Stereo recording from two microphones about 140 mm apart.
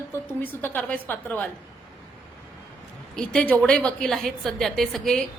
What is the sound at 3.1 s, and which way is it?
A woman's voice, 5° left (ahead or behind).